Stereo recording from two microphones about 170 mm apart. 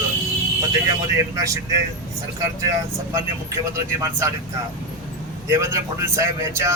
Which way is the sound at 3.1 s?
20° right (ahead or behind).